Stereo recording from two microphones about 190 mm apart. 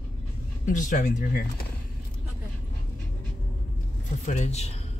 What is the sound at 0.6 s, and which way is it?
Speech, 40° left (ahead or behind).